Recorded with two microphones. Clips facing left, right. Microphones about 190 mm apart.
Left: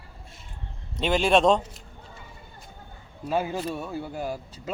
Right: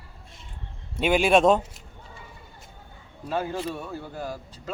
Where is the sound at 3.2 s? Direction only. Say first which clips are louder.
Left 1 dB; 10° left (ahead or behind).